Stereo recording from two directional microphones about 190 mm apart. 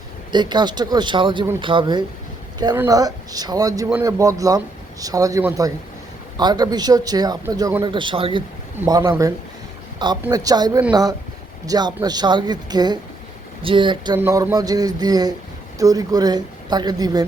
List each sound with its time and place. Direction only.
0.3 s speech: 25° right (ahead or behind)
14.2 s speech: 15° right (ahead or behind)